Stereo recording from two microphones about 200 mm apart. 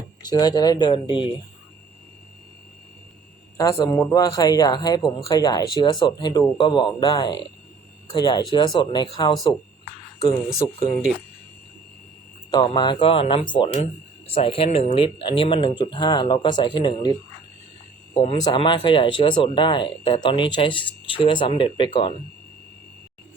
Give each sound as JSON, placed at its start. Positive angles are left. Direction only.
{"t": 0.2, "sound": "speech", "side_deg": 20}
{"t": 3.6, "sound": "speech", "side_deg": 15}
{"t": 12.5, "sound": "speech", "side_deg": 20}
{"t": 18.2, "sound": "speech", "side_deg": 25}